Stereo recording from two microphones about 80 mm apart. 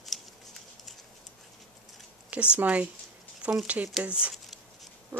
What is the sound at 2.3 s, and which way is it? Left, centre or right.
Speech, centre.